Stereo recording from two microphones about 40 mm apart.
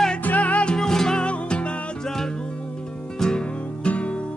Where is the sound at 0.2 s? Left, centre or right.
Left.